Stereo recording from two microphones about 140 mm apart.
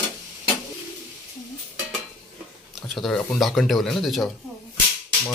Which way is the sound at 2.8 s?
Centre (ahead or behind).